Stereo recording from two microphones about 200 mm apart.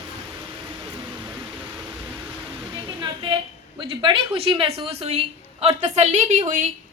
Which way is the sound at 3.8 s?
25° right (ahead or behind).